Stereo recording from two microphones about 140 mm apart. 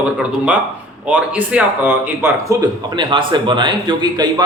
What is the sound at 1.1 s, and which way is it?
A man's voice, 10° right (ahead or behind).